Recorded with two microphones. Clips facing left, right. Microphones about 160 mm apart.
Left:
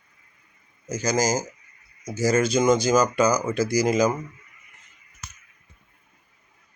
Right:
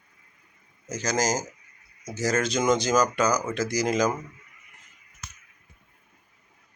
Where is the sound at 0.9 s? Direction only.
5° left (ahead or behind).